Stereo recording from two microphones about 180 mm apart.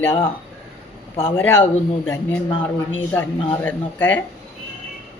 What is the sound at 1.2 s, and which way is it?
A man's voice, 10° left (ahead or behind).